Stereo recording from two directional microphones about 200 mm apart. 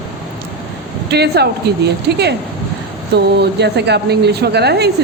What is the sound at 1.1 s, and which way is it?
A woman's voice, 55° right (ahead or behind).